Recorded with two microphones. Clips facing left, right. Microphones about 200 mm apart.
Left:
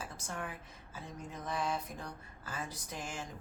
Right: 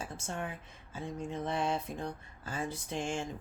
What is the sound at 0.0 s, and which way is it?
A woman's voice, 25° right (ahead or behind).